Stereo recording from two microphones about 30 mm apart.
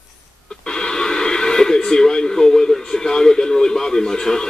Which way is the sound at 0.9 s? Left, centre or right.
Left.